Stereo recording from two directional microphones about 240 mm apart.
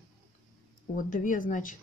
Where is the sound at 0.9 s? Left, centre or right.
Left.